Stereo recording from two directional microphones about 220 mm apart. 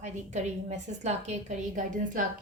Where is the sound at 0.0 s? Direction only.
30° right (ahead or behind).